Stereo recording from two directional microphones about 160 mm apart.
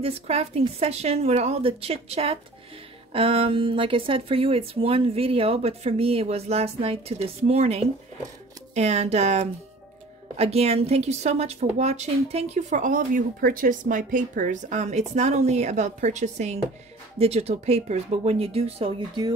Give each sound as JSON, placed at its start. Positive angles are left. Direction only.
{"t": 0.0, "sound": "a woman's voice", "side_deg": -40}